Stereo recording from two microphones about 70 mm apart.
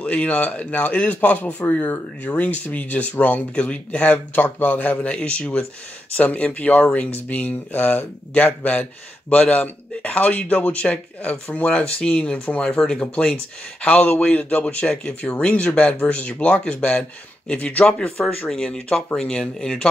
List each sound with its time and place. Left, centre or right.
0.0 s speech: centre